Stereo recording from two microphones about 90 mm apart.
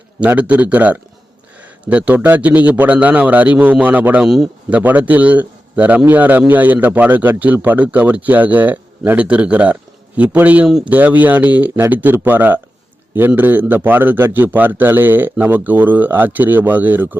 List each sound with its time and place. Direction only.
0.3 s a man's voice: 15° right (ahead or behind)